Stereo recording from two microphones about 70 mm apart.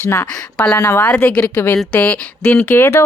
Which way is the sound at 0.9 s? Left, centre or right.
Centre.